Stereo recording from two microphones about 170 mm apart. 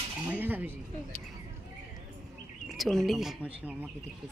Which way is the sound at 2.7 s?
Centre (ahead or behind).